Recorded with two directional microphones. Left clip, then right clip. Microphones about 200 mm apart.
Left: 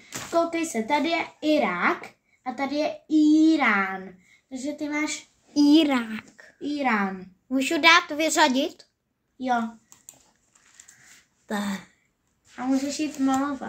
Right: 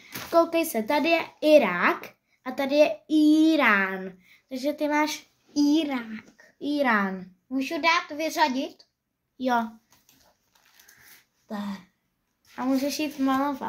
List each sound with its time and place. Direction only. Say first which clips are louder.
0.3 s speech: right 3 dB; 60° right (ahead or behind)
5.5 s a child's voice: left 5 dB; 5° left (ahead or behind)
6.6 s a woman's voice: right 1 dB; 50° right (ahead or behind)
7.4 s speech: left 5 dB; 25° left (ahead or behind)
9.4 s speech: even; 55° right (ahead or behind)
11.4 s speech: left 6 dB; 30° left (ahead or behind)
12.5 s speech: even; 55° right (ahead or behind)